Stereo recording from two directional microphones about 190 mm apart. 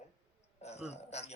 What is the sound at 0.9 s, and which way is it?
Speech, 35° left (ahead or behind).